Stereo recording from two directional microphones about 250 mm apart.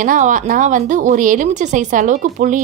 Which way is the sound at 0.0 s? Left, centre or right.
Right.